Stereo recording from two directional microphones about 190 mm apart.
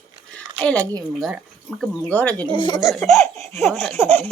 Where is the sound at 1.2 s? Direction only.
5° right (ahead or behind).